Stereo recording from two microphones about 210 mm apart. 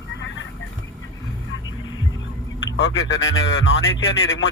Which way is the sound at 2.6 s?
60° left (ahead or behind).